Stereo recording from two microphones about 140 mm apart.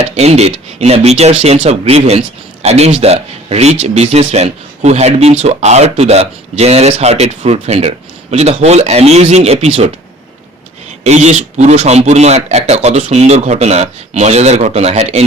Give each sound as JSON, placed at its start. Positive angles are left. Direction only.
{"t": 0.0, "sound": "speech", "side_deg": -50}
{"t": 11.0, "sound": "speech", "side_deg": -55}